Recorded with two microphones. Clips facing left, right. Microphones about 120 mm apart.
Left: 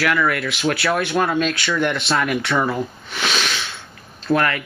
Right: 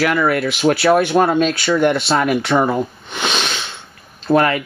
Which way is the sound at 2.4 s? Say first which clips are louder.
Right 5 dB; 30° right (ahead or behind).